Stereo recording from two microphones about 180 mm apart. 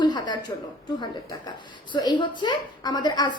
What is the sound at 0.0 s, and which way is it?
A woman's voice, 25° left (ahead or behind).